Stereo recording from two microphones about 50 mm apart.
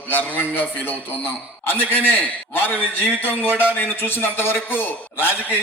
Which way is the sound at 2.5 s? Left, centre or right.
Left.